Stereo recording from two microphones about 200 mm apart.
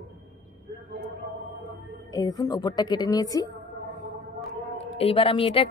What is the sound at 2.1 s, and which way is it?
A woman's voice, 20° left (ahead or behind).